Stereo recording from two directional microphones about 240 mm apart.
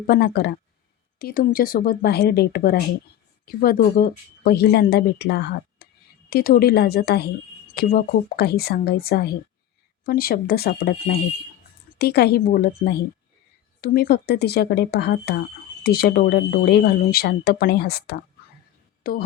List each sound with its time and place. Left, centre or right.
0.1 s speech: left